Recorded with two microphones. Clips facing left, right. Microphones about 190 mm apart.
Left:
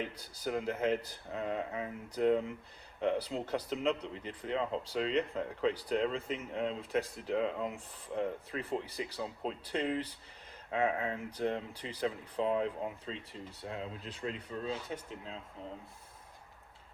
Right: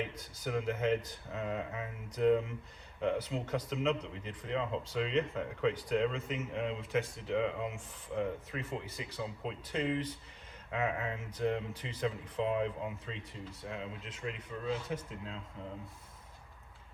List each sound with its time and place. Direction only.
0.1 s speech: 35° left (ahead or behind)